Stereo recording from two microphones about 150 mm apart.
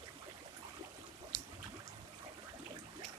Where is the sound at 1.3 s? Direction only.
30° left (ahead or behind).